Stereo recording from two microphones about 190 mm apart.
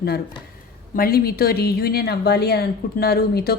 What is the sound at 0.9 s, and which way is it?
A woman's voice, 50° left (ahead or behind).